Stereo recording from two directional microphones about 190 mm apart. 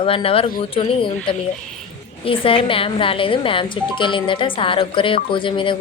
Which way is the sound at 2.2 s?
30° left (ahead or behind).